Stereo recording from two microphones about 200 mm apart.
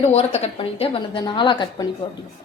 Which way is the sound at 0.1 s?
30° left (ahead or behind).